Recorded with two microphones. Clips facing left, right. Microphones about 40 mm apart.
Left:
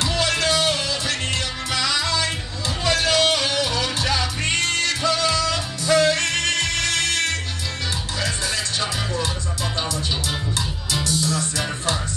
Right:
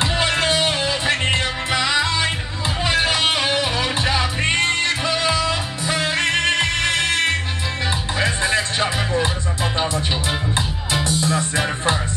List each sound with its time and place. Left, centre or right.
0.0 s music: right
10.9 s music: right